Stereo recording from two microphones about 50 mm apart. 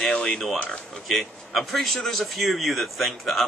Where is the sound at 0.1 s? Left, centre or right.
Centre.